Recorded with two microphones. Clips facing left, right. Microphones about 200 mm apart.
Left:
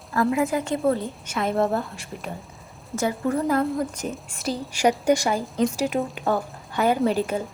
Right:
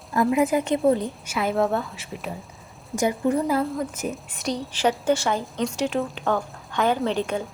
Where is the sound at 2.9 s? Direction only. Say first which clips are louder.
Right 2 dB; 15° right (ahead or behind).